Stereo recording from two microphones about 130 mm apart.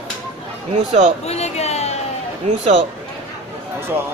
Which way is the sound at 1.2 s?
55° left (ahead or behind).